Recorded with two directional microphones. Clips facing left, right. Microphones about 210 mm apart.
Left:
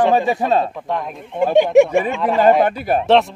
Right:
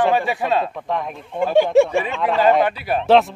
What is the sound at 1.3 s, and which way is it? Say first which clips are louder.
Speech: left 3 dB; 20° left (ahead or behind).